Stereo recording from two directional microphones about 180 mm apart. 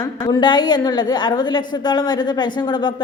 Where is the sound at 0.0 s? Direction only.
20° left (ahead or behind).